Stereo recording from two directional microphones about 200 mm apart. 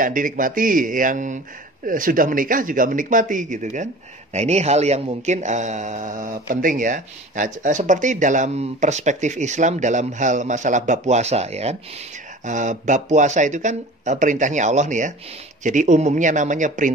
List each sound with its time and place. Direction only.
0.0 s speech: 40° right (ahead or behind)